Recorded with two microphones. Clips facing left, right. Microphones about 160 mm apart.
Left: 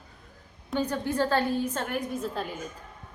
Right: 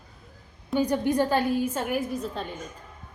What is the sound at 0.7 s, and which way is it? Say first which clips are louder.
A woman's voice: right 4 dB; 15° right (ahead or behind).